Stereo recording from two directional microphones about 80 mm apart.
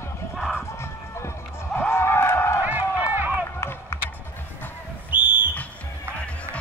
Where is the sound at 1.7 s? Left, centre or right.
Left.